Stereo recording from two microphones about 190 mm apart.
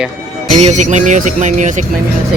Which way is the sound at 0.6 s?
40° right (ahead or behind).